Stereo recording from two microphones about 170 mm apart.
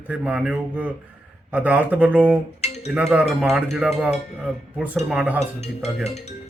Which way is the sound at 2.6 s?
40° left (ahead or behind).